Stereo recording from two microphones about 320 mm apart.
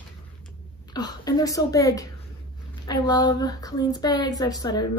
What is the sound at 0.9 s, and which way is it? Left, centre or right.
Speech, centre.